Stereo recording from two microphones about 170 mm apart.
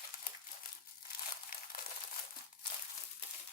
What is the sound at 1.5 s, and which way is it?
Crumpling, 60° left (ahead or behind).